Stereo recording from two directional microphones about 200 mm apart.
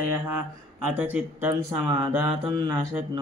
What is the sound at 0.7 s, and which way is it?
Speech, 5° right (ahead or behind).